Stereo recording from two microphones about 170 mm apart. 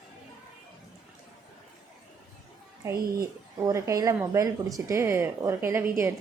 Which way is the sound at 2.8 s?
15° right (ahead or behind).